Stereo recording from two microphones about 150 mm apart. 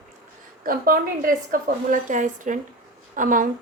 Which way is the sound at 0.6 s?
70° right (ahead or behind).